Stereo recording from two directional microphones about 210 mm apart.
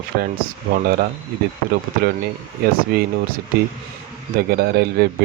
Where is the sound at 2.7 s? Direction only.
45° right (ahead or behind).